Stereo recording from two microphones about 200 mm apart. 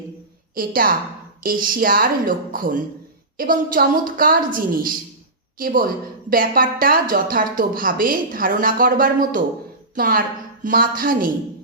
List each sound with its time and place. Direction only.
0.5 s a woman's voice: 45° right (ahead or behind)